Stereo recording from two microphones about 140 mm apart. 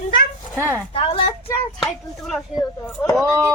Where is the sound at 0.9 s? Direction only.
45° left (ahead or behind).